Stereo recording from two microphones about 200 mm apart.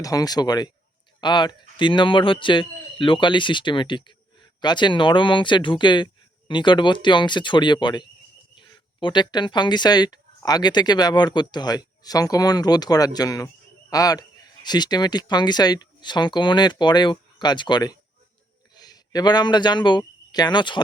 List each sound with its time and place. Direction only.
0.0 s speech: 15° left (ahead or behind)